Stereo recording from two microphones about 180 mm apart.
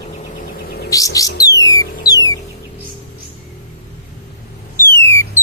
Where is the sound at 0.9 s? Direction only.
20° left (ahead or behind).